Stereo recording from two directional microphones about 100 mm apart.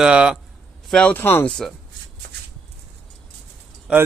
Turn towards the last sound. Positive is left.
turn(degrees=-10)  # may be behind; listen again after turning